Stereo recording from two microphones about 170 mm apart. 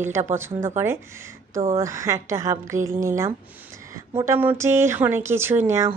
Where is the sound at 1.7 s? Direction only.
20° right (ahead or behind).